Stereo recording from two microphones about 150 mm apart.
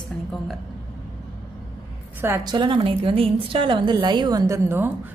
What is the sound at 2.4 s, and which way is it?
A woman's voice, 30° right (ahead or behind).